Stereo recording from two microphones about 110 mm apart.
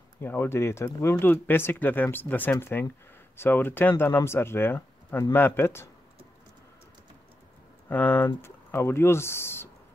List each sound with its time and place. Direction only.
0.2 s speech: 20° left (ahead or behind)
7.9 s speech: 15° left (ahead or behind)